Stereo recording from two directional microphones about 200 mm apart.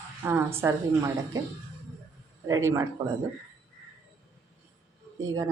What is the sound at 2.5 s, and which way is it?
Speech, 15° right (ahead or behind).